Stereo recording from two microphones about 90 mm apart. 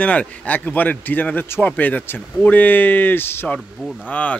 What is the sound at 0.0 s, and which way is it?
A man's voice, 15° left (ahead or behind).